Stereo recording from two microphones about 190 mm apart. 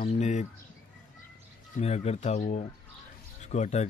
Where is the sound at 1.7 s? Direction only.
35° left (ahead or behind).